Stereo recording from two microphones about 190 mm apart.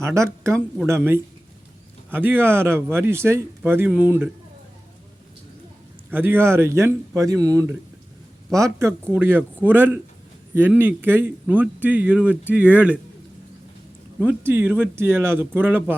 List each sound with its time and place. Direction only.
0.0 s speech: 15° right (ahead or behind)
6.1 s speech: 10° right (ahead or behind)
14.2 s speech: 10° right (ahead or behind)